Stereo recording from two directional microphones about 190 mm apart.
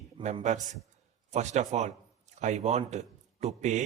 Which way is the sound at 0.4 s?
40° right (ahead or behind).